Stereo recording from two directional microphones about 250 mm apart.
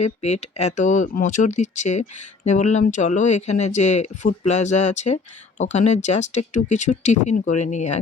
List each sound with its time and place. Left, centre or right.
0.0 s speech: left